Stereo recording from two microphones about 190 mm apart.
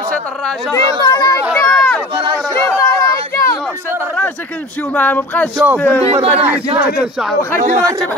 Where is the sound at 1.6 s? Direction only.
10° left (ahead or behind).